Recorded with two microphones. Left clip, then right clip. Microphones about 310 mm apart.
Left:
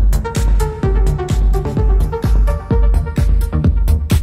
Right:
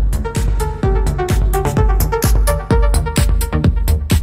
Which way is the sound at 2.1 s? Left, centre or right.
Right.